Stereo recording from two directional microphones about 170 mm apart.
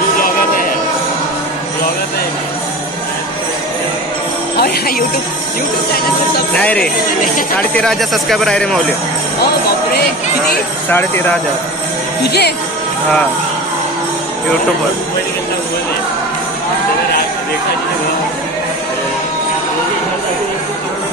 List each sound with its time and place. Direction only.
4.6 s speech: 65° left (ahead or behind)
6.5 s speech: 10° left (ahead or behind)
10.9 s speech: 10° left (ahead or behind)
12.2 s speech: 75° left (ahead or behind)